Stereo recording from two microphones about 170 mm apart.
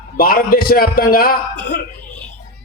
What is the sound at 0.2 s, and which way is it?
A man's voice, 60° left (ahead or behind).